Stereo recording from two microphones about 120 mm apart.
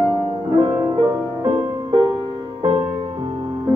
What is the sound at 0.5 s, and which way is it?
Music, 30° right (ahead or behind).